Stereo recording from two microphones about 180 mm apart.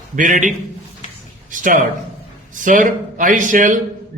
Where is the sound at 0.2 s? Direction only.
45° right (ahead or behind).